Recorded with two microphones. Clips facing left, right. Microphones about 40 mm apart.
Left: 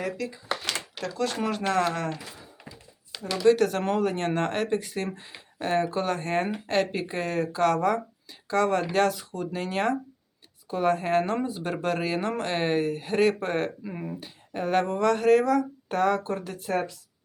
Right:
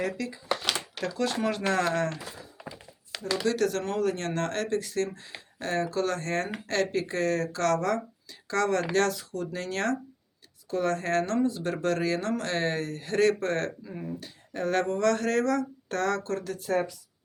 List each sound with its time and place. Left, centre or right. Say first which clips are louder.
0.0 s speech: even; centre
3.4 s speech: left 7 dB; left
13.8 s speech: left 2 dB; left
14.2 s speech: left 1 dB; centre